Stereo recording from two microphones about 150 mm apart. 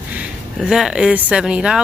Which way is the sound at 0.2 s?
5° right (ahead or behind).